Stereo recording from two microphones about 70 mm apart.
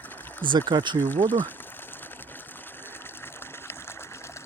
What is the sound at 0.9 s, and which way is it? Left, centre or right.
Speech, left.